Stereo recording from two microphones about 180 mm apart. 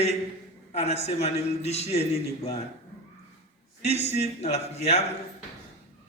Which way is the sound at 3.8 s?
35° left (ahead or behind).